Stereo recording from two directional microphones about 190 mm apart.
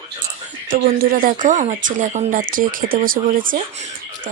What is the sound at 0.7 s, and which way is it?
Speech, 50° right (ahead or behind).